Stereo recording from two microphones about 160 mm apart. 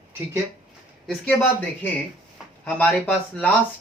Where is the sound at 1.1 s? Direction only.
10° left (ahead or behind).